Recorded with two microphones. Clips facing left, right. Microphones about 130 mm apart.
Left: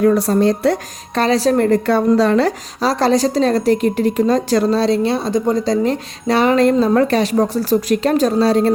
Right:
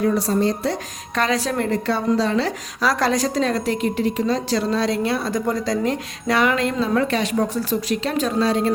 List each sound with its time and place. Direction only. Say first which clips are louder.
0.0 s speech: left 6 dB; 60° left (ahead or behind)
1.1 s a woman's voice: left 7 dB; 30° left (ahead or behind); by 2.5 s 55° left (ahead or behind)
2.8 s a woman's voice: left 5 dB; 30° left (ahead or behind); by 4.7 s 50° left (ahead or behind)
4.7 s a woman's voice: left 5 dB; 30° left (ahead or behind)